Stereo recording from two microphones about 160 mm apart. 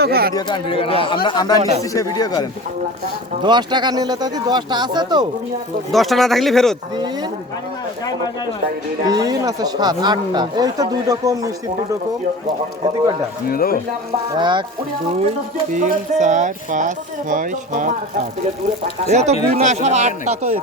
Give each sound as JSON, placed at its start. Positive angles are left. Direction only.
{"t": 0.0, "sound": "speech", "side_deg": -75}
{"t": 0.3, "sound": "a man's voice", "side_deg": 30}
{"t": 3.4, "sound": "speech", "side_deg": -30}
{"t": 5.9, "sound": "speech", "side_deg": 0}
{"t": 9.0, "sound": "speech", "side_deg": -25}
{"t": 13.5, "sound": "speech", "side_deg": 65}
{"t": 14.3, "sound": "speech", "side_deg": -30}
{"t": 15.7, "sound": "speech", "side_deg": -50}
{"t": 19.0, "sound": "speech", "side_deg": -45}